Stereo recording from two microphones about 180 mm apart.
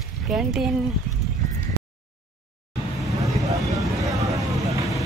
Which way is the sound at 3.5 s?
20° right (ahead or behind).